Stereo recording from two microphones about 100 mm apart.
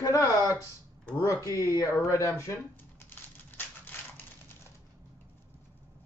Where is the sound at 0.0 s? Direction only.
35° left (ahead or behind).